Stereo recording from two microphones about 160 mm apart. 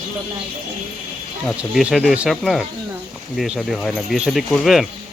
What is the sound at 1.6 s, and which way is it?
Speech, 5° right (ahead or behind).